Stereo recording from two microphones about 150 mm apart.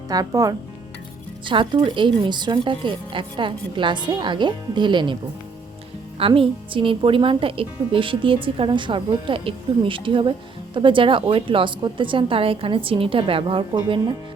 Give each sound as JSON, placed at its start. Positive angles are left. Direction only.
{"t": 0.1, "sound": "a woman's voice", "side_deg": -25}
{"t": 6.1, "sound": "a woman's voice", "side_deg": -35}